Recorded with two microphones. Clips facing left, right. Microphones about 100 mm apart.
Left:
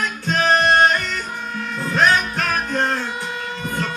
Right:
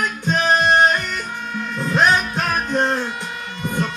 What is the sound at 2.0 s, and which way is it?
Music, 15° right (ahead or behind).